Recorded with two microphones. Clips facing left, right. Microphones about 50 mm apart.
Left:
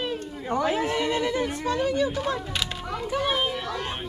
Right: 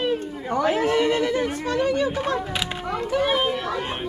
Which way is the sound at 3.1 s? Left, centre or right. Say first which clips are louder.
Right 4 dB; centre.